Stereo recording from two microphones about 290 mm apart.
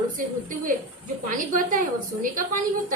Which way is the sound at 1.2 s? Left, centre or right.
Right.